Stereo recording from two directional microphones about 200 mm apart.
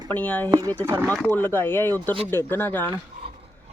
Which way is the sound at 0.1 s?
10° left (ahead or behind).